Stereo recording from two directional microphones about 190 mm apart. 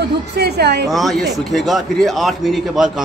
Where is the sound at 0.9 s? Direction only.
Centre (ahead or behind).